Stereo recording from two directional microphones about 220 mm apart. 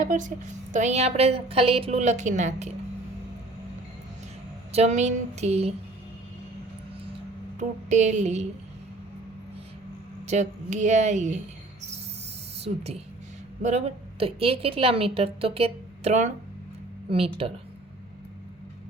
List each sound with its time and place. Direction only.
0.0 s a woman's voice: 35° right (ahead or behind)
4.7 s a woman's voice: 30° right (ahead or behind)
7.6 s a woman's voice: 30° right (ahead or behind)
10.2 s a woman's voice: 30° right (ahead or behind)
12.6 s a woman's voice: 25° right (ahead or behind)